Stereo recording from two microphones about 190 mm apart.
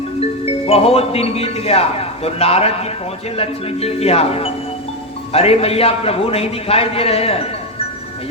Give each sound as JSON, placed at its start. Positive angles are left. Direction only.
{"t": 0.4, "sound": "speech", "side_deg": 30}